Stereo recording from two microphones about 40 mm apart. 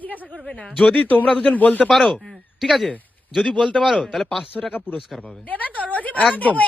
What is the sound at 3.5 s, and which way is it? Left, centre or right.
Speech, left.